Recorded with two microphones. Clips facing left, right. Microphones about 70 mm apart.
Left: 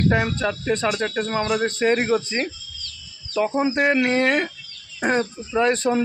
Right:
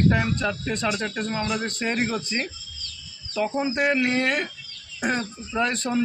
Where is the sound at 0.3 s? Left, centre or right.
Left.